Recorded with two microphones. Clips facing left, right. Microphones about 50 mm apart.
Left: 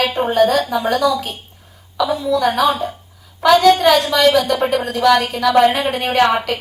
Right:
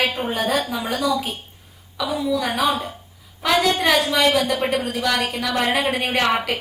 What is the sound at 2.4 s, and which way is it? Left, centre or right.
A woman's voice, centre.